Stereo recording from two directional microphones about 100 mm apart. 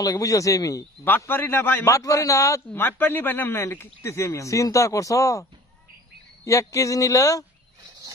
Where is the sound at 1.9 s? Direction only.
30° left (ahead or behind).